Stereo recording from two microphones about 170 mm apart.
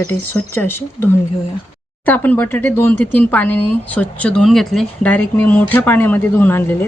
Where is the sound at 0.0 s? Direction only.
15° left (ahead or behind).